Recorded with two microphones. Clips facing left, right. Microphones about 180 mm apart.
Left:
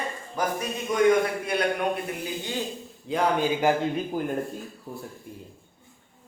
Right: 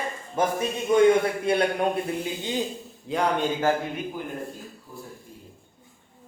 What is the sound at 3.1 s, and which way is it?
Speech, centre (ahead or behind).